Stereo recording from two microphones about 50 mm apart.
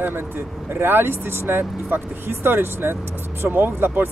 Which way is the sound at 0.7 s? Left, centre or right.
Right.